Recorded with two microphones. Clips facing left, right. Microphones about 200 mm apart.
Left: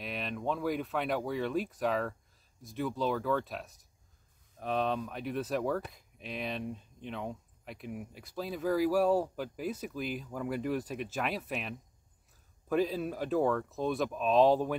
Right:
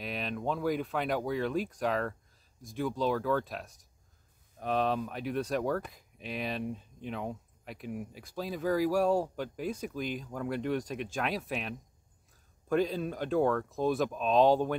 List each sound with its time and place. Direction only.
0.0 s speech: centre (ahead or behind)